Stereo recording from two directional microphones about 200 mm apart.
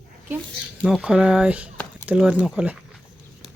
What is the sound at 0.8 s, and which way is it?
Speech, 5° right (ahead or behind).